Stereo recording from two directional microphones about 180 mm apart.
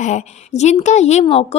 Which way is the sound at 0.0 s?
40° left (ahead or behind).